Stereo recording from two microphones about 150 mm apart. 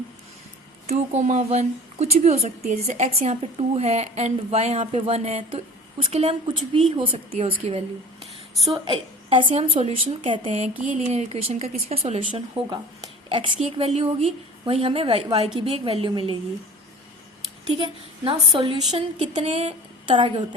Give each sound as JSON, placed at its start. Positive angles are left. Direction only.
{"t": 0.9, "sound": "a woman's voice", "side_deg": -50}
{"t": 18.6, "sound": "a woman's voice", "side_deg": -40}